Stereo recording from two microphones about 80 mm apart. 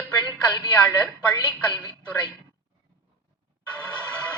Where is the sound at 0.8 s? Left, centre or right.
Centre.